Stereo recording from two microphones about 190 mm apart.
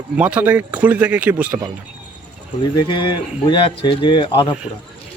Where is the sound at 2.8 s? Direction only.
25° left (ahead or behind).